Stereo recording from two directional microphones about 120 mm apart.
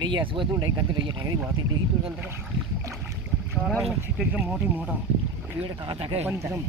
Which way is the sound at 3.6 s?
Centre (ahead or behind).